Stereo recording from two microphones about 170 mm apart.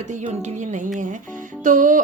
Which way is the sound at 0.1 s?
45° right (ahead or behind).